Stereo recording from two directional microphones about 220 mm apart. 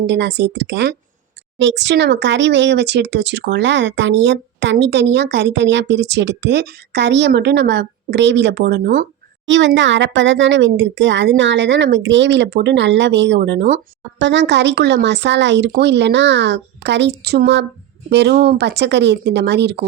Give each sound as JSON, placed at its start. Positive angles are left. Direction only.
{"t": 0.1, "sound": "speech", "side_deg": -50}
{"t": 9.5, "sound": "speech", "side_deg": -55}